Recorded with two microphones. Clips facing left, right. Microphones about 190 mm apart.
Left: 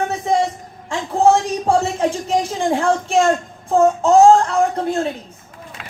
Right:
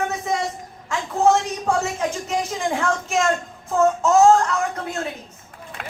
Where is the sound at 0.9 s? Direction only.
30° left (ahead or behind).